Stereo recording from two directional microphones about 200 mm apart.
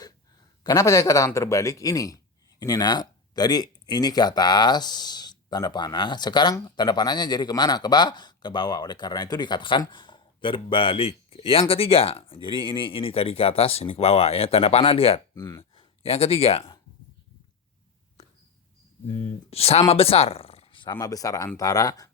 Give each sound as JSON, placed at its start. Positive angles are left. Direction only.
{"t": 0.6, "sound": "a man's voice", "side_deg": 20}
{"t": 19.0, "sound": "a man's voice", "side_deg": 30}